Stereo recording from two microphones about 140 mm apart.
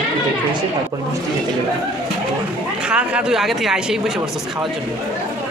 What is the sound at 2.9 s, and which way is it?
A man's voice, 5° right (ahead or behind).